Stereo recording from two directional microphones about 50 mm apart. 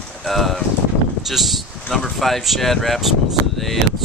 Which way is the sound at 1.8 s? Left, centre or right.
Centre.